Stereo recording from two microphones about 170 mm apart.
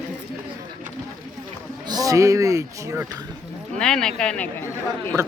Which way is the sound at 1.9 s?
20° right (ahead or behind).